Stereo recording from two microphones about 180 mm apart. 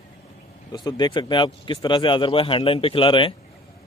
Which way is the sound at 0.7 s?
25° left (ahead or behind).